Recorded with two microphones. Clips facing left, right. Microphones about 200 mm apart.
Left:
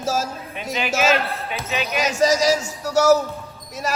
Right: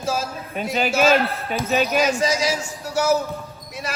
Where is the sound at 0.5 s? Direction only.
40° right (ahead or behind).